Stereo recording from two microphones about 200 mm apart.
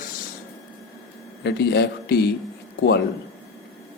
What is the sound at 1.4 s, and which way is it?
Speech, 55° left (ahead or behind).